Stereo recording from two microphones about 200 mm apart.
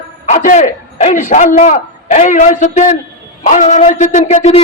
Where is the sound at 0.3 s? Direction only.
35° left (ahead or behind).